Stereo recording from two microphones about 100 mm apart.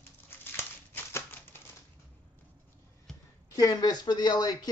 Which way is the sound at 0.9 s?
20° left (ahead or behind).